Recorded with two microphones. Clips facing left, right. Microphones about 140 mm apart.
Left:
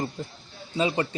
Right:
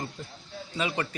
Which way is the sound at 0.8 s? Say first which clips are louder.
Left 5 dB; 25° left (ahead or behind).